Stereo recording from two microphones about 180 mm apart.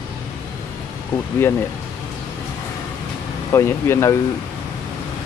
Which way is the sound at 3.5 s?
15° left (ahead or behind).